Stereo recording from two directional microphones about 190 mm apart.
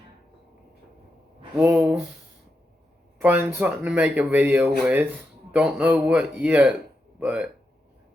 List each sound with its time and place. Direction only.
1.5 s speech: 5° right (ahead or behind)
3.2 s speech: 10° right (ahead or behind)